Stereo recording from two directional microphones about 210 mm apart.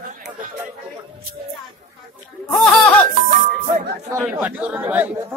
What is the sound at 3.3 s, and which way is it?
Music, 40° right (ahead or behind).